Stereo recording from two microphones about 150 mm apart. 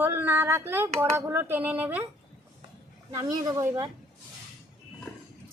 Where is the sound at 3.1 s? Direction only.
25° right (ahead or behind).